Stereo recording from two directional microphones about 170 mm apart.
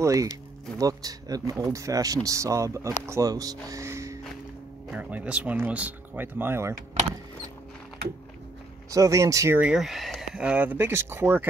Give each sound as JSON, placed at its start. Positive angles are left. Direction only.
{"t": 0.0, "sound": "speech", "side_deg": -20}
{"t": 8.9, "sound": "speech", "side_deg": -20}
{"t": 9.6, "sound": "speech", "side_deg": -5}